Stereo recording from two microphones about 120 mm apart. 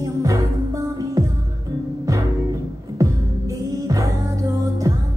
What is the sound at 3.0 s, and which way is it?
Music, 30° right (ahead or behind).